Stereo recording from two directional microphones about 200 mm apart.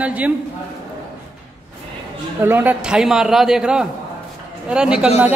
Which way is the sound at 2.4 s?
10° right (ahead or behind).